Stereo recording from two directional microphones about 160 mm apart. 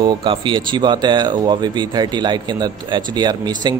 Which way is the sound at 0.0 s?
30° right (ahead or behind).